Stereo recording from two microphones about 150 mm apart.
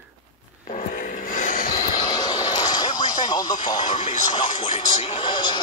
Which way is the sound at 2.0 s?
30° left (ahead or behind).